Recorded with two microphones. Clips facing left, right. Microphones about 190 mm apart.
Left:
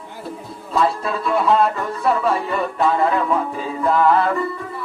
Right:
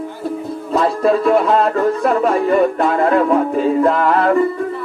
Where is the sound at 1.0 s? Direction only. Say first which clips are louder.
Right 6 dB; 50° right (ahead or behind).